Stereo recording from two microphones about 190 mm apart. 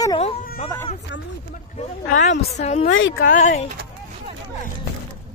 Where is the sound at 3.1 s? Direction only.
45° left (ahead or behind).